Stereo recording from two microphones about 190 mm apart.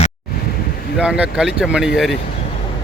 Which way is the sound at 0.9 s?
5° right (ahead or behind).